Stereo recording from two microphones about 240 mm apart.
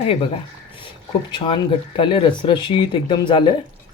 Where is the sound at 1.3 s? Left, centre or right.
Left.